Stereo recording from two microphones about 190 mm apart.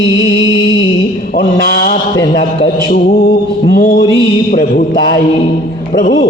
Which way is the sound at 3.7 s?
60° left (ahead or behind).